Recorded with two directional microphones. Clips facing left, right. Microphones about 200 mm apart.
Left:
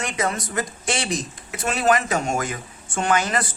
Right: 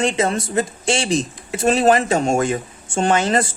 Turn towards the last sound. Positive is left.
turn(degrees=-30)  # may be behind; listen again after turning